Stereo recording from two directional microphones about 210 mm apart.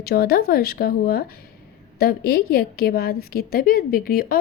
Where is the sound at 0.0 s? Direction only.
45° left (ahead or behind).